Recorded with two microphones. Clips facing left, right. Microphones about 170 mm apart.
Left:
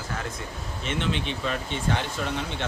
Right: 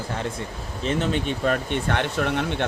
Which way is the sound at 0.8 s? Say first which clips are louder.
Right 5 dB; 40° right (ahead or behind).